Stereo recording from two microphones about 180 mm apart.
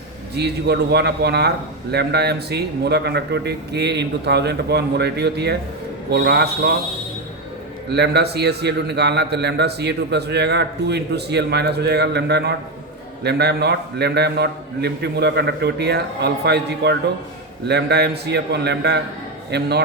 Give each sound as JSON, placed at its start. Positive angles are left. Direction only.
{"t": 0.3, "sound": "a man's voice", "side_deg": -65}
{"t": 7.9, "sound": "a man's voice", "side_deg": -65}